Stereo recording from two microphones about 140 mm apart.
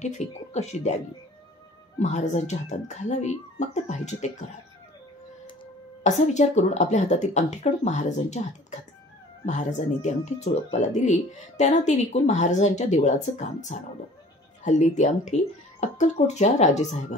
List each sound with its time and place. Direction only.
0.0 s speech: 55° left (ahead or behind)
2.0 s speech: 55° left (ahead or behind)
6.0 s speech: 55° left (ahead or behind)